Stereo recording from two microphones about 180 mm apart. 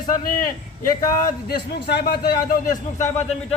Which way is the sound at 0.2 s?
50° left (ahead or behind).